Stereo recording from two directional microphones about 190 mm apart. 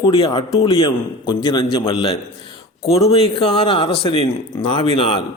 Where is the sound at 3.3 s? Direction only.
30° left (ahead or behind).